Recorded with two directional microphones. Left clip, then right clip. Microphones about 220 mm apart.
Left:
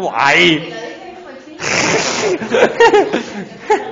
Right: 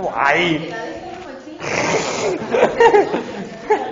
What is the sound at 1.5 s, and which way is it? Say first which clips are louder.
Speech: left 4 dB; 50° left (ahead or behind).